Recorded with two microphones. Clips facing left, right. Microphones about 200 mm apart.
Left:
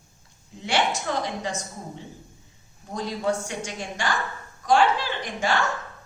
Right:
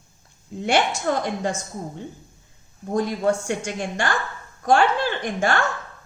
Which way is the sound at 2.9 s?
50° right (ahead or behind).